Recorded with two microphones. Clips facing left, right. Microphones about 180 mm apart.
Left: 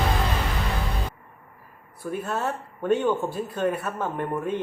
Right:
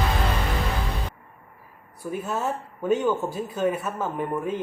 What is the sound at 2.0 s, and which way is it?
Speech, centre (ahead or behind).